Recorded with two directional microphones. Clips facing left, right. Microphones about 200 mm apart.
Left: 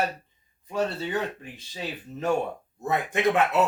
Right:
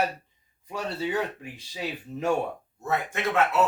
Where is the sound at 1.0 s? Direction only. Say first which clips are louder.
Right 1 dB; 10° right (ahead or behind).